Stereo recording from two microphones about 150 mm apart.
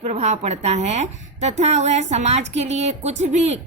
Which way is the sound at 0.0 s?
45° right (ahead or behind).